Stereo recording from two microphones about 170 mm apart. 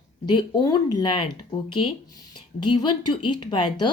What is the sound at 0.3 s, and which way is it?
Speech, 25° left (ahead or behind).